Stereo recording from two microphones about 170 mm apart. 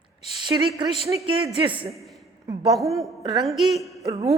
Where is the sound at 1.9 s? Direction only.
Centre (ahead or behind).